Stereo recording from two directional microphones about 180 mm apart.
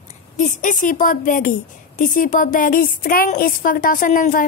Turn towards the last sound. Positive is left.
turn(degrees=50)  # may be behind; listen again after turning